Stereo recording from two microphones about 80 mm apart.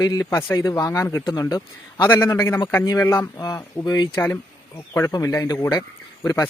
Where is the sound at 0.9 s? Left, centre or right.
Left.